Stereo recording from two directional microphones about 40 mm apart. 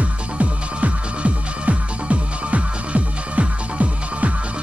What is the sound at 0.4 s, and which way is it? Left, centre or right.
Music, right.